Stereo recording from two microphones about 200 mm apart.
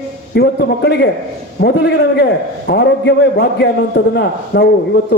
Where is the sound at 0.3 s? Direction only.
55° left (ahead or behind).